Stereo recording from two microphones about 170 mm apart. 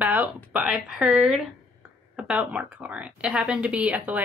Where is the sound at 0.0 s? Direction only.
10° right (ahead or behind).